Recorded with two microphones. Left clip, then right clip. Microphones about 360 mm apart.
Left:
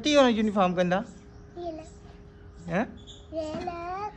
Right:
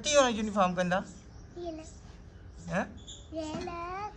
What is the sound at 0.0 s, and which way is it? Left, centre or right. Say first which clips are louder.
A woman's voice: left 4 dB; centre.